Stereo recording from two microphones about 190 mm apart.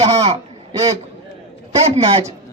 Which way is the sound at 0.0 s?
30° right (ahead or behind).